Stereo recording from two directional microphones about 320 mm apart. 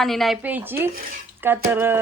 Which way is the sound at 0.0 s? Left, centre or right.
Centre.